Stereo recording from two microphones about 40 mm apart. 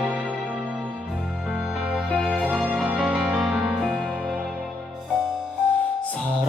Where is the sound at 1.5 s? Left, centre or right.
Right.